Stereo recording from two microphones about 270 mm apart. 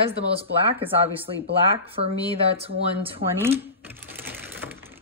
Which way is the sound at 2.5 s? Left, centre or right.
Right.